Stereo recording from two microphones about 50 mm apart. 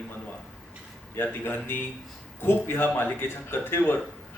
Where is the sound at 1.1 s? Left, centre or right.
Left.